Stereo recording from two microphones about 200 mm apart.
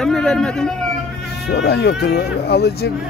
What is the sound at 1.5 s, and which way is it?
Insect, 55° left (ahead or behind).